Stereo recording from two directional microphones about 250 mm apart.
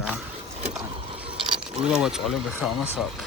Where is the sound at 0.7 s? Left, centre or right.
Centre.